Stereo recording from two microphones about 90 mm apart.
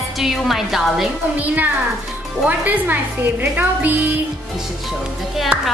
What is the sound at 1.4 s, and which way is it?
A woman's voice, 20° right (ahead or behind).